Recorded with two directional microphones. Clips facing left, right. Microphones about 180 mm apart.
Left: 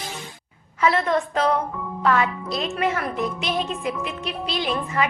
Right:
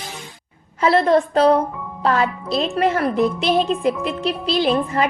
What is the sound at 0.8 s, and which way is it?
A woman's voice, 35° right (ahead or behind).